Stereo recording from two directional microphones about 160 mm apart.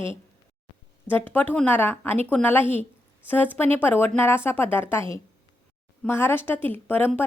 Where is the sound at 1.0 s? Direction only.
10° left (ahead or behind).